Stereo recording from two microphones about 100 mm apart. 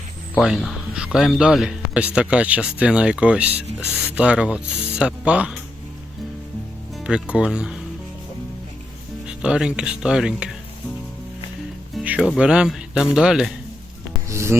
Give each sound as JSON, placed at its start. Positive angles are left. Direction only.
{"t": 0.3, "sound": "speech", "side_deg": 0}
{"t": 7.0, "sound": "speech", "side_deg": -10}
{"t": 9.2, "sound": "speech", "side_deg": -10}
{"t": 12.0, "sound": "speech", "side_deg": -15}
{"t": 14.3, "sound": "music", "side_deg": -25}